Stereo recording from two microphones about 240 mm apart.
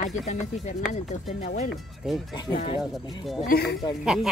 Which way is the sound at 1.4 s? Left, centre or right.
Left.